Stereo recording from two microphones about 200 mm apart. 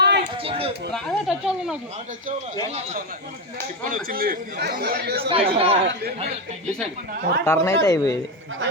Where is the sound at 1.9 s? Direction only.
40° right (ahead or behind).